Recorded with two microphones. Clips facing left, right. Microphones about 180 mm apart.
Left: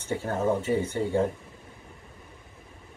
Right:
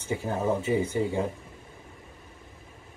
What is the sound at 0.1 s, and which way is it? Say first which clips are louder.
Speech: left 1 dB; 5° right (ahead or behind).